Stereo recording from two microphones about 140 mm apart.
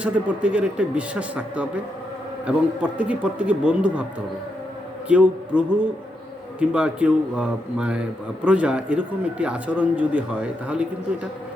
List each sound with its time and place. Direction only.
0.0 s speech: 10° right (ahead or behind)
5.0 s a man's voice: 10° right (ahead or behind)